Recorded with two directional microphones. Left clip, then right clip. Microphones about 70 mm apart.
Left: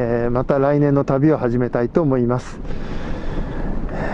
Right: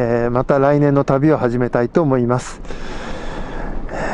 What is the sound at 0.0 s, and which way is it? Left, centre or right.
Speech, right.